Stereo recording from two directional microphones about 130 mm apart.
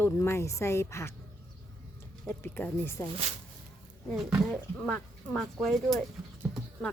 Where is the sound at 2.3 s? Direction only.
15° left (ahead or behind).